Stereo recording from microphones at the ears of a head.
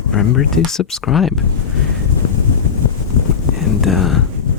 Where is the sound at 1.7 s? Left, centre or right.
Left.